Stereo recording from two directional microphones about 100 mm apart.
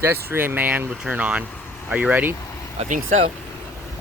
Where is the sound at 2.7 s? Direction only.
90° right.